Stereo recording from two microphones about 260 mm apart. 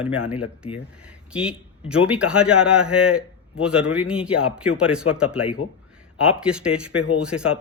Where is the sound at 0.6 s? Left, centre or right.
Left.